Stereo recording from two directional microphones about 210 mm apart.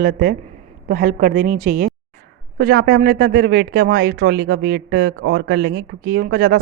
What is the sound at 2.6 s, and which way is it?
Speech, 45° right (ahead or behind).